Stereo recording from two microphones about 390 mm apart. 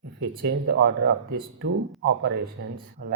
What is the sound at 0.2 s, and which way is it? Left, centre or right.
Speech, right.